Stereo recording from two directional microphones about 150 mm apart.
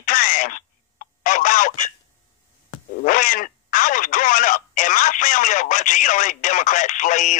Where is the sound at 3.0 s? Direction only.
65° left (ahead or behind).